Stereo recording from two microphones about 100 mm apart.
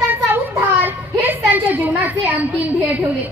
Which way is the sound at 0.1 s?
20° right (ahead or behind).